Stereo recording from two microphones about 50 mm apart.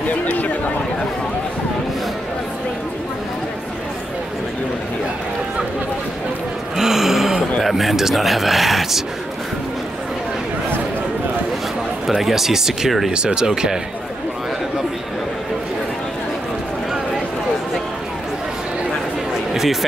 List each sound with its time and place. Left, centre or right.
0.1 s a sound: left
6.8 s a sound: centre
7.6 s speech: centre
12.1 s speech: centre
13.1 s speech: centre
19.5 s speech: centre